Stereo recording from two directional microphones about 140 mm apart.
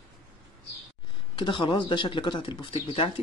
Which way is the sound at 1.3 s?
35° left (ahead or behind).